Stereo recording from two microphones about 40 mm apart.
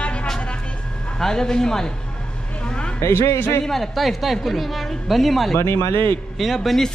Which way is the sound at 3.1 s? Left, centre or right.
Left.